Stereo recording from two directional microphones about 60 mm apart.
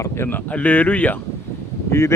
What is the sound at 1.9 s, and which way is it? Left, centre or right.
Speech, left.